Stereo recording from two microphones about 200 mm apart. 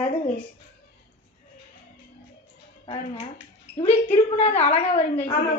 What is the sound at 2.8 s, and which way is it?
A child's voice, 30° left (ahead or behind).